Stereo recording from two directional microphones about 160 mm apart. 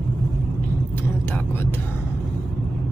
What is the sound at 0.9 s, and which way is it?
Vehicle, 10° left (ahead or behind).